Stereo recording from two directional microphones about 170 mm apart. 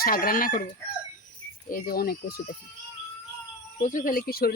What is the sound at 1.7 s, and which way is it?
Speech, 60° left (ahead or behind).